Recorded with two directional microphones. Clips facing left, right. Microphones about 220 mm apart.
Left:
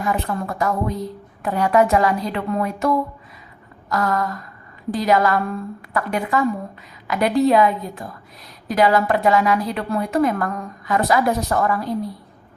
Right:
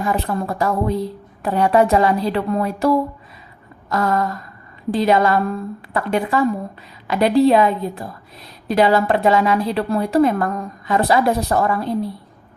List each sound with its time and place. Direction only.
0.0 s a woman's voice: 30° right (ahead or behind)